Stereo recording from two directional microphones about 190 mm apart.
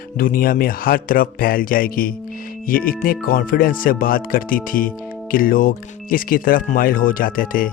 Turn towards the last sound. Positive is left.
turn(degrees=50)  # may be behind; listen again after turning